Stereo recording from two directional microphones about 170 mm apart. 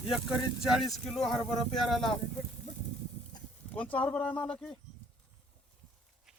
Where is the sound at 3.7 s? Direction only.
10° left (ahead or behind).